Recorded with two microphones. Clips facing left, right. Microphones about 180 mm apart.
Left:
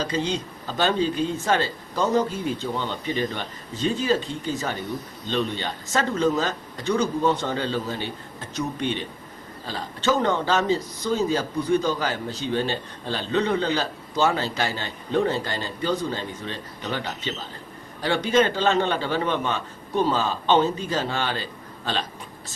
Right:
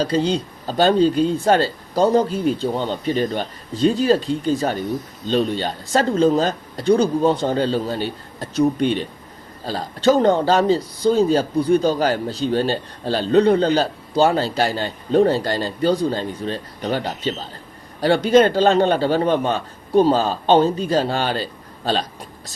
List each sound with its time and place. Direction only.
0.0 s speech: 35° right (ahead or behind)